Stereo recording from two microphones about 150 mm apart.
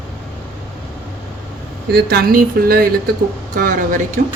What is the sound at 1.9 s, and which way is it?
Speech, 90° right.